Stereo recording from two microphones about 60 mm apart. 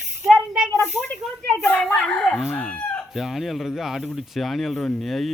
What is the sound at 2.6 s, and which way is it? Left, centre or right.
Chicken, left.